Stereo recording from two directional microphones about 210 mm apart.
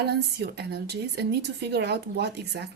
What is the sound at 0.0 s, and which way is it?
A woman's voice, 50° right (ahead or behind).